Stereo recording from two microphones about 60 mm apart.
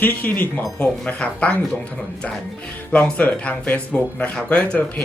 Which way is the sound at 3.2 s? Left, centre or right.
Left.